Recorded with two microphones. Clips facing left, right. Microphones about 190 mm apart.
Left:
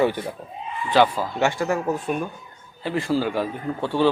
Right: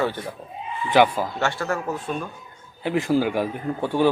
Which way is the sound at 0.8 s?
15° right (ahead or behind).